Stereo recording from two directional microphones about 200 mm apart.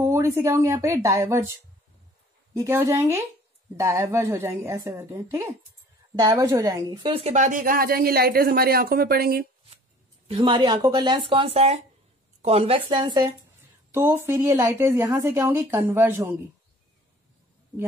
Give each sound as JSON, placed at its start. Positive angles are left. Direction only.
{"t": 0.0, "sound": "speech", "side_deg": -10}
{"t": 2.5, "sound": "a woman's voice", "side_deg": -15}
{"t": 10.2, "sound": "a woman's voice", "side_deg": -30}